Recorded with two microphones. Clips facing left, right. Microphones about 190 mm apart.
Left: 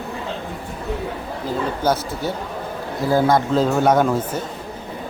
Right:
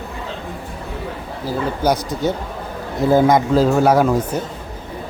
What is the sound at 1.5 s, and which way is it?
Speech, 15° right (ahead or behind).